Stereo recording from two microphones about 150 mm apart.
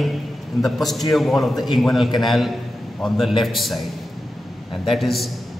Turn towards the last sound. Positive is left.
turn(degrees=0)  # may be behind; listen again after turning